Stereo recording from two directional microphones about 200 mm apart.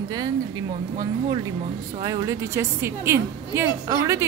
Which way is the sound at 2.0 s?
15° right (ahead or behind).